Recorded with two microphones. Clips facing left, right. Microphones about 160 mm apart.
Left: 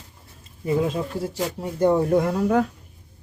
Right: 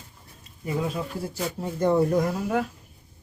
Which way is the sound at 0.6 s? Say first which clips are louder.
Left 6 dB; 30° left (ahead or behind).